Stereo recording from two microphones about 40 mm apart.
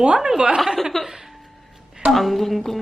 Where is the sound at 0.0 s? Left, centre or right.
Centre.